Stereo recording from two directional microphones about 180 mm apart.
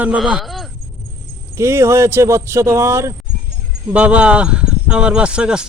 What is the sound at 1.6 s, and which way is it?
Speech, 15° right (ahead or behind).